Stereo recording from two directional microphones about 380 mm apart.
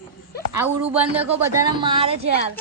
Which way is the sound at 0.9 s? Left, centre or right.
Centre.